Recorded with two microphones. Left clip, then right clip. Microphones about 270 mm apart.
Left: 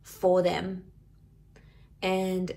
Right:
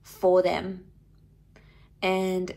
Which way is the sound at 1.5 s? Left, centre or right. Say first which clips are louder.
Right 3 dB; right.